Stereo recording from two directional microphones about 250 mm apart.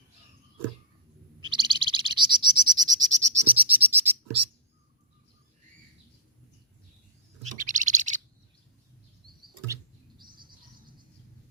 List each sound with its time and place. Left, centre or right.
1.5 s bird: centre
7.4 s bird: right